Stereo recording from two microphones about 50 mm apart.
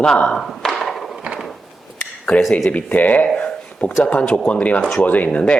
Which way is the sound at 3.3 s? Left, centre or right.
Left.